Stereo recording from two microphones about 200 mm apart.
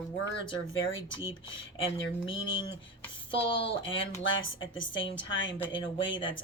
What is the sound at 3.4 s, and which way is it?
Speech, 60° left (ahead or behind).